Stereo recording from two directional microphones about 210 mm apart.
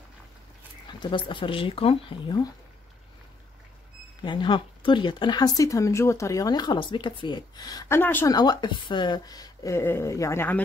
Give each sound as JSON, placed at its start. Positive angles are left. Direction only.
{"t": 0.8, "sound": "speech", "side_deg": 20}
{"t": 4.2, "sound": "speech", "side_deg": 20}